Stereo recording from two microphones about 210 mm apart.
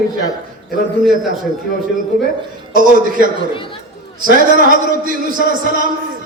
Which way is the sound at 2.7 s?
40° right (ahead or behind).